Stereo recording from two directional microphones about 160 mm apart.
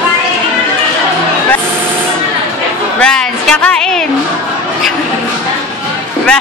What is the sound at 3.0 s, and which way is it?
Music, 5° left (ahead or behind).